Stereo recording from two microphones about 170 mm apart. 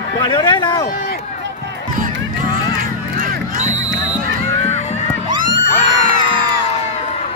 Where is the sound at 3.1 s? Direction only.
50° right (ahead or behind).